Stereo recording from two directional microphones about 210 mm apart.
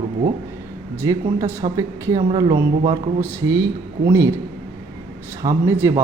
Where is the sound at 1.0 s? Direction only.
15° right (ahead or behind).